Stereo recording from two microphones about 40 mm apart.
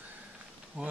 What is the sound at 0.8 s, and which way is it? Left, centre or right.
Speech, right.